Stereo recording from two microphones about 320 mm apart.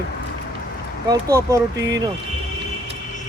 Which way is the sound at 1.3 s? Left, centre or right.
Centre.